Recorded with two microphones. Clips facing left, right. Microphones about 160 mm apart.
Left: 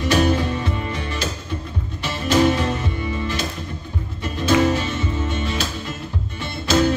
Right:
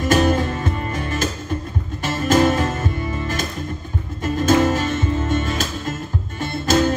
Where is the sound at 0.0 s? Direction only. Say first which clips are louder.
Right 1 dB; 45° right (ahead or behind).